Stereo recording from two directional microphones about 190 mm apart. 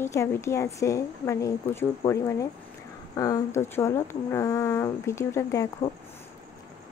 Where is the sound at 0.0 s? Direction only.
15° left (ahead or behind).